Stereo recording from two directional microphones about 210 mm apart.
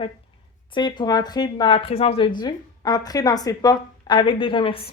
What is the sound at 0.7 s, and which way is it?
A woman's voice, 20° left (ahead or behind).